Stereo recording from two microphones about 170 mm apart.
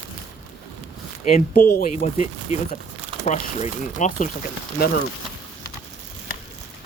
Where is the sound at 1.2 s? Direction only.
50° left (ahead or behind).